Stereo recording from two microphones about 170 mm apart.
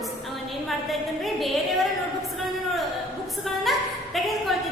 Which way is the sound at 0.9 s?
Centre (ahead or behind).